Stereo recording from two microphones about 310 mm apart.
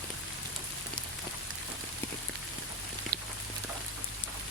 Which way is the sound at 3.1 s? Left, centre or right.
Right.